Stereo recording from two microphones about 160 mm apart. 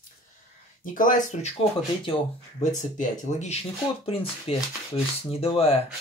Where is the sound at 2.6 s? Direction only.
50° left (ahead or behind).